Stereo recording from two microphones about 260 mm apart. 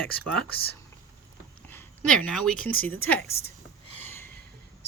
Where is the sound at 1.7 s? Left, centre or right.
Centre.